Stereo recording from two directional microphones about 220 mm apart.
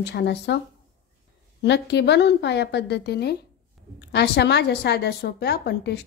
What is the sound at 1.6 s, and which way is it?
A woman's voice, 50° left (ahead or behind).